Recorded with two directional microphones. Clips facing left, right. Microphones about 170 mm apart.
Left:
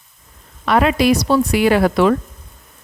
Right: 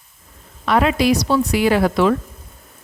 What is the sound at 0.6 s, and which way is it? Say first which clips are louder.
Speech: left 2 dB; 60° left (ahead or behind).